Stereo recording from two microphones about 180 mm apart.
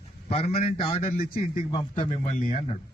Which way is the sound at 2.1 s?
45° left (ahead or behind).